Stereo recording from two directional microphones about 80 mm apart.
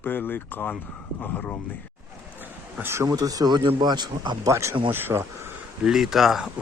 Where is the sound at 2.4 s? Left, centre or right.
Right.